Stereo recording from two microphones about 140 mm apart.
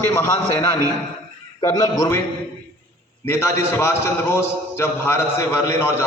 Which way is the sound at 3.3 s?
20° left (ahead or behind).